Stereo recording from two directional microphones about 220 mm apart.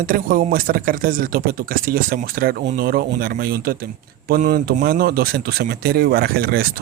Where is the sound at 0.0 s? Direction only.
40° right (ahead or behind).